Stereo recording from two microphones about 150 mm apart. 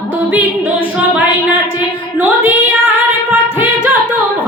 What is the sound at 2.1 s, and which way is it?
Female singing, 10° right (ahead or behind).